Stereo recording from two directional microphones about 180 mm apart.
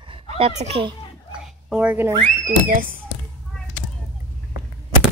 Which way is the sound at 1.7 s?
10° right (ahead or behind).